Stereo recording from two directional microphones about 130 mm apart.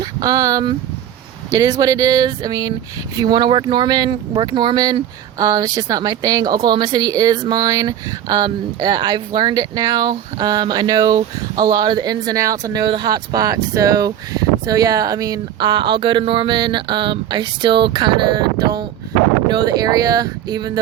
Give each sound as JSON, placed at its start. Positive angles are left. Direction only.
{"t": 0.0, "sound": "speech", "side_deg": -30}